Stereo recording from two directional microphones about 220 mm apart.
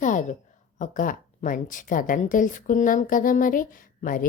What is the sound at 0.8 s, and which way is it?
A woman's voice, 35° left (ahead or behind).